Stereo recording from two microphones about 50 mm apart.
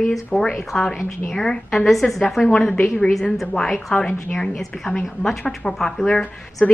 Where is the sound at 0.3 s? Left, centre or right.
Centre.